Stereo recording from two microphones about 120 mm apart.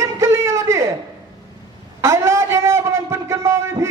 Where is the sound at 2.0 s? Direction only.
25° right (ahead or behind).